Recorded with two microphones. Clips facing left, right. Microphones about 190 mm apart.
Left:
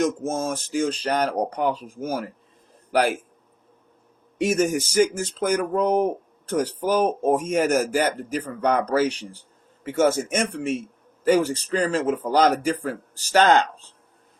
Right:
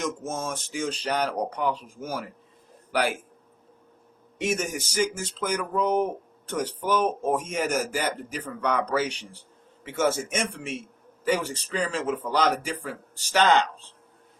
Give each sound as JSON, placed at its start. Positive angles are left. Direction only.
{"t": 0.0, "sound": "a man's voice", "side_deg": 40}
{"t": 4.4, "sound": "speech", "side_deg": 40}